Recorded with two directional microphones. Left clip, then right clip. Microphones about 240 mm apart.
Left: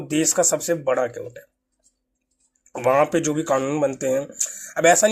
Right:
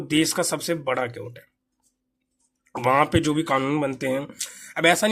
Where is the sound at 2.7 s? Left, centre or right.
Right.